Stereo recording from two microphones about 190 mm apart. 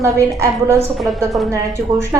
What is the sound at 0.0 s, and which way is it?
A woman's voice, 15° right (ahead or behind).